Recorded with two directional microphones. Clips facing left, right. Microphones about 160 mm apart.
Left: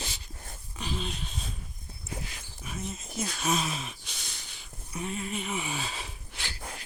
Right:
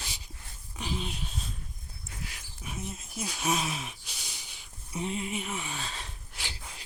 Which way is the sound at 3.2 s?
10° right (ahead or behind).